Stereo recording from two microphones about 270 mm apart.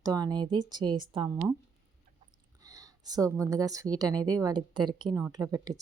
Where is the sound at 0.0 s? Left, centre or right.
Centre.